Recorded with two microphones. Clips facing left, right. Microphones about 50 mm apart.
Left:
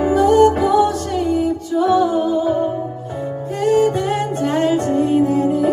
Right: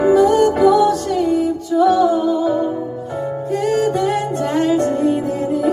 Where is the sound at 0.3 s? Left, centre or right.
Left.